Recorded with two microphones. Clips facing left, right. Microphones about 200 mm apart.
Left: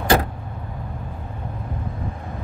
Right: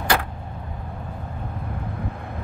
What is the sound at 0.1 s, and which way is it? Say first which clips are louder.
Vehicle: left 6 dB; 40° left (ahead or behind).